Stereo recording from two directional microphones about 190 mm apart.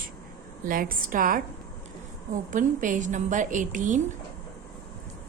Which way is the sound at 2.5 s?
45° right (ahead or behind).